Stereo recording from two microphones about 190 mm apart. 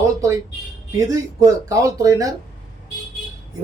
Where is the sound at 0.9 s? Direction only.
15° right (ahead or behind).